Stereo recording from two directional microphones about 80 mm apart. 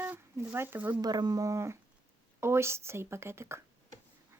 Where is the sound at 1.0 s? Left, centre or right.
Right.